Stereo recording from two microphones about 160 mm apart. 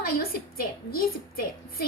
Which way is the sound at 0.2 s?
65° left (ahead or behind).